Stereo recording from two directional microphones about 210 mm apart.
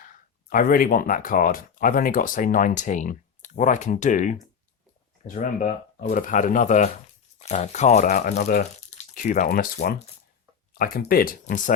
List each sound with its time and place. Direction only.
0.0 s speech: 40° left (ahead or behind)